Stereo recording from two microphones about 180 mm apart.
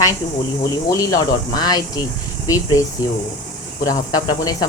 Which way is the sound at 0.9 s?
20° left (ahead or behind).